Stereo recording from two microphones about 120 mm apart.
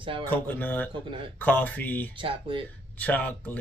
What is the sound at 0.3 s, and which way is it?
Speech, 15° left (ahead or behind).